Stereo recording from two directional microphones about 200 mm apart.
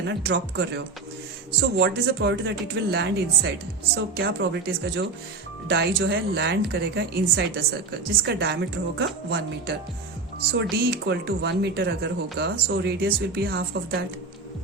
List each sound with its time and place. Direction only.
0.0 s a woman's voice: 55° right (ahead or behind)